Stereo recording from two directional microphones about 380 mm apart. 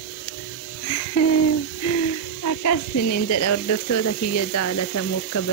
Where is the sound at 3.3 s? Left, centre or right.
Left.